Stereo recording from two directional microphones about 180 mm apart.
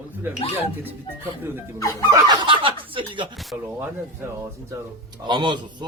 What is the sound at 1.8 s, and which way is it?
Music, 20° left (ahead or behind).